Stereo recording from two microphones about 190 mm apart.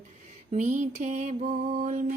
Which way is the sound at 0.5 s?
40° right (ahead or behind).